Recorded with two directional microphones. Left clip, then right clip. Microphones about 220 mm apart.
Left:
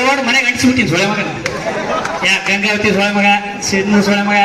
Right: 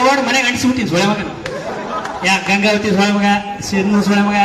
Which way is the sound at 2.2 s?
45° right (ahead or behind).